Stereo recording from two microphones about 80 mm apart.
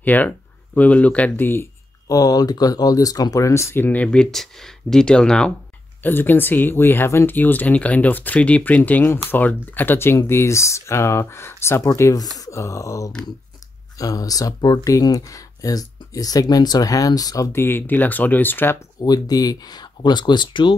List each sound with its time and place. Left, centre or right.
0.0 s speech: left
2.0 s speech: left; by 5.5 s centre
6.0 s speech: left
17.5 s speech: left
18.9 s speech: left